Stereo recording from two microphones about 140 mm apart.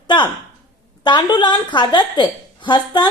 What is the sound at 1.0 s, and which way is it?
A woman's voice, 35° left (ahead or behind).